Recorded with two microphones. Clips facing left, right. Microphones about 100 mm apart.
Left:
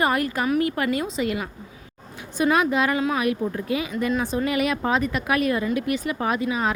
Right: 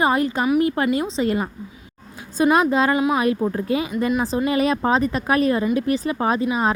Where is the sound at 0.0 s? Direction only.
25° right (ahead or behind).